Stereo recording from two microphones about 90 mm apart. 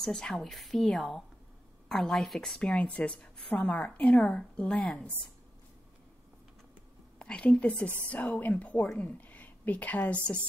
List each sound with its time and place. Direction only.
0.0 s a woman's voice: 5° left (ahead or behind)
2.7 s a woman's voice: 15° left (ahead or behind)
7.2 s a woman's voice: 15° left (ahead or behind)